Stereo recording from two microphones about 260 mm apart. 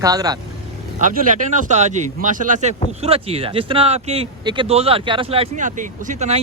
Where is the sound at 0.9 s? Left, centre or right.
Right.